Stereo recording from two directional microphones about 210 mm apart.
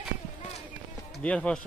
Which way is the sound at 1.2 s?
5° left (ahead or behind).